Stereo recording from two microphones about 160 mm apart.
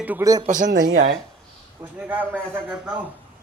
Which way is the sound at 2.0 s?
10° right (ahead or behind).